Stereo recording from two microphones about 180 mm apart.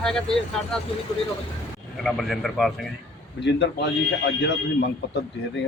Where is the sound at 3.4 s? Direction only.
70° left (ahead or behind).